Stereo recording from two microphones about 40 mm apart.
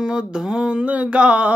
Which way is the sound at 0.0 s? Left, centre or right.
Centre.